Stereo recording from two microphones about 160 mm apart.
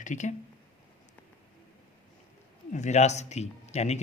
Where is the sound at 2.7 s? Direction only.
45° left (ahead or behind).